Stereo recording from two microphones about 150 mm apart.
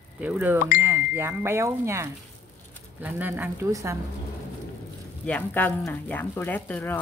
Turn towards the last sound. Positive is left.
turn(degrees=10)  # may be behind; listen again after turning